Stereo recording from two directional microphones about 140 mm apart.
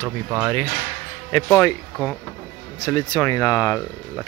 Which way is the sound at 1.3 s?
30° left (ahead or behind).